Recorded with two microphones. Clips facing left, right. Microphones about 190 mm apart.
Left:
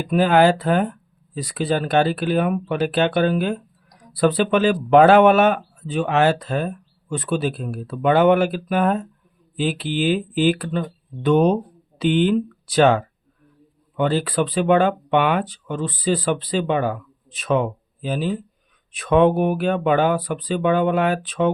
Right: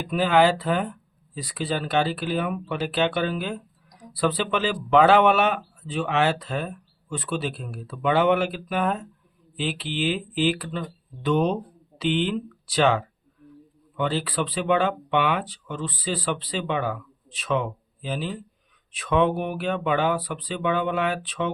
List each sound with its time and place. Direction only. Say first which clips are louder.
0.0 s speech: left 4 dB; 45° left (ahead or behind)